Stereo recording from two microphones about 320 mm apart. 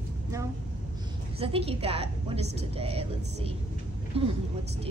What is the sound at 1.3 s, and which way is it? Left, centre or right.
A woman's voice, centre.